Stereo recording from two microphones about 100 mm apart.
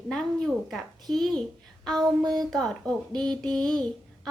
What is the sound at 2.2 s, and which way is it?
Speech, 45° right (ahead or behind).